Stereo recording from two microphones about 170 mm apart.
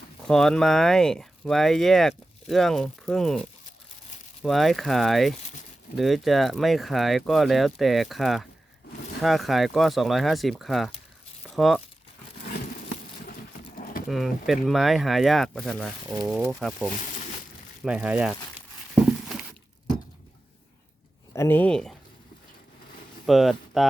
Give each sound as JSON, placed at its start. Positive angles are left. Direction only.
{"t": 0.3, "sound": "speech", "side_deg": 0}
{"t": 4.4, "sound": "speech", "side_deg": 0}
{"t": 13.7, "sound": "a sound", "side_deg": 55}
{"t": 14.1, "sound": "speech", "side_deg": 0}
{"t": 21.3, "sound": "speech", "side_deg": 15}
{"t": 23.2, "sound": "speech", "side_deg": 0}